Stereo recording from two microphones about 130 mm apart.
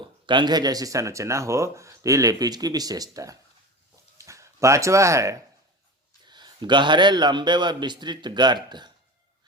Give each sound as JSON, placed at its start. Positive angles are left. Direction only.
{"t": 0.0, "sound": "speech", "side_deg": -35}
{"t": 6.2, "sound": "a man's voice", "side_deg": -35}